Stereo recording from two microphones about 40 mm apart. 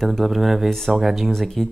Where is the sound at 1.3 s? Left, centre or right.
Centre.